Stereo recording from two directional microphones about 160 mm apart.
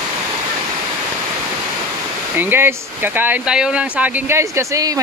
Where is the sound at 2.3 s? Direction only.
15° right (ahead or behind).